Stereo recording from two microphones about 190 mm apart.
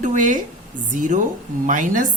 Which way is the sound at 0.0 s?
40° right (ahead or behind).